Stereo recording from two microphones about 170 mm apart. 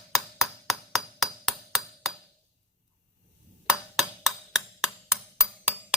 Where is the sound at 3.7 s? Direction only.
Centre (ahead or behind).